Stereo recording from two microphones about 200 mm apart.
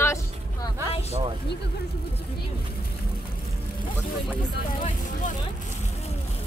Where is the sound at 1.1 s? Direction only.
30° right (ahead or behind).